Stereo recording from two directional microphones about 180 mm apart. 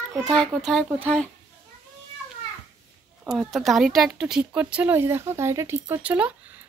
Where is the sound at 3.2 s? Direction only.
Centre (ahead or behind).